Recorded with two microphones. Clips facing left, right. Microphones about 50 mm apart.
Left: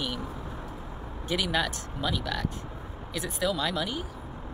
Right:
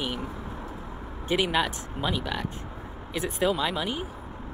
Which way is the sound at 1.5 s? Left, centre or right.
Centre.